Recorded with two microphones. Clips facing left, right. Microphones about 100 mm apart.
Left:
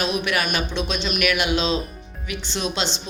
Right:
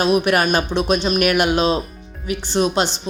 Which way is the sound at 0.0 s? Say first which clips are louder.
Right 7 dB; 45° right (ahead or behind).